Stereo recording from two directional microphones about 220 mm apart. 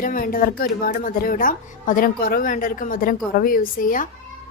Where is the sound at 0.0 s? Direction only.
40° left (ahead or behind).